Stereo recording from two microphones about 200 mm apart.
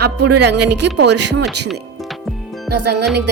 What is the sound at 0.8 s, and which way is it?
Speech, 60° right (ahead or behind).